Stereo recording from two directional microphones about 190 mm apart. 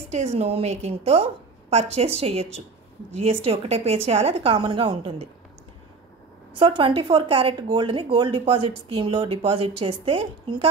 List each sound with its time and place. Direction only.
0.1 s a woman's voice: 35° right (ahead or behind)
6.5 s speech: 25° right (ahead or behind)